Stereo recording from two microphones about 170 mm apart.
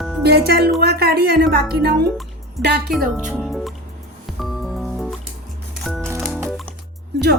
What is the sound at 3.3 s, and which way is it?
Music, centre (ahead or behind).